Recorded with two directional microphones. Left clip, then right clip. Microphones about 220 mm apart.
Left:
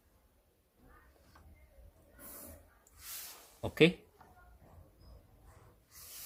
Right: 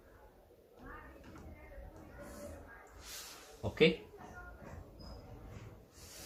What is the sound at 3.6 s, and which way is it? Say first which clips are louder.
Speech: left 2 dB; 50° left (ahead or behind).